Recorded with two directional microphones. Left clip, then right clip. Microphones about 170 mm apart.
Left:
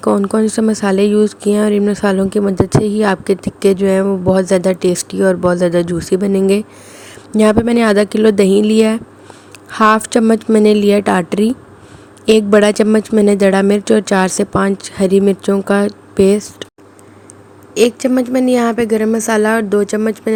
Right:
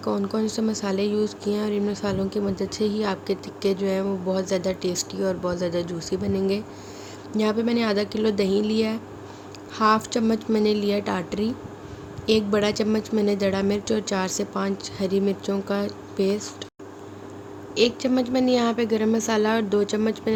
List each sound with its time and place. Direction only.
0.0 s speech: 60° left (ahead or behind)
17.7 s a woman's voice: 45° left (ahead or behind)